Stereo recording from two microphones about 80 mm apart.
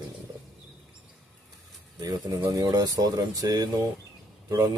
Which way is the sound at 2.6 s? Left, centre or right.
Right.